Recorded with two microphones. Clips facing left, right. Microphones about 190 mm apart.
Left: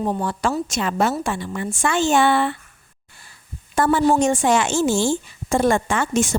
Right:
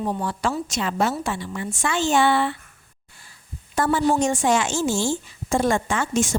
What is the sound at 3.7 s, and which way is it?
A woman's voice, 60° left (ahead or behind).